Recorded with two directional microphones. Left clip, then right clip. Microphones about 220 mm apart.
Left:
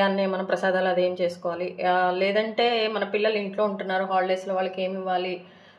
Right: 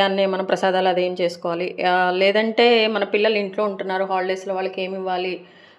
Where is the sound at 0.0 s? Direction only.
35° right (ahead or behind).